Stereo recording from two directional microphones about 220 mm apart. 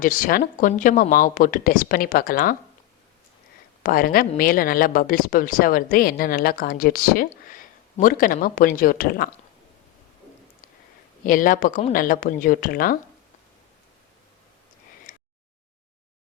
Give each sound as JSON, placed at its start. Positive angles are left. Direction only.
{"t": 0.0, "sound": "a woman's voice", "side_deg": 40}
{"t": 3.8, "sound": "a woman's voice", "side_deg": 40}
{"t": 11.3, "sound": "a woman's voice", "side_deg": 40}
{"t": 15.1, "sound": "a sound", "side_deg": 35}